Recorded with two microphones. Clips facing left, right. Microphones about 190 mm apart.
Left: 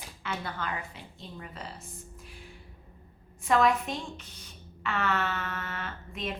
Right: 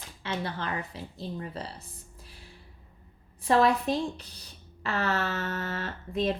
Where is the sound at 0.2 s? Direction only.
25° right (ahead or behind).